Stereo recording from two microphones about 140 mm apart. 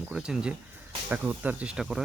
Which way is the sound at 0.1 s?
5° right (ahead or behind).